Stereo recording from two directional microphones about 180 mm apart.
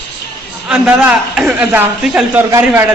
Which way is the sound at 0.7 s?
5° right (ahead or behind).